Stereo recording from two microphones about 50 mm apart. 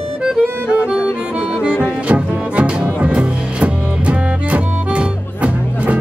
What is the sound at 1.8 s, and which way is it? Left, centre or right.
Music, right.